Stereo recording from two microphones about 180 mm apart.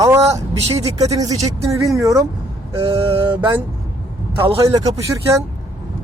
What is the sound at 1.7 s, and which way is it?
Speech, 15° right (ahead or behind).